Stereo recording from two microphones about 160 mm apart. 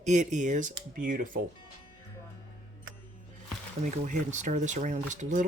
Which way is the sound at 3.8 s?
50° right (ahead or behind).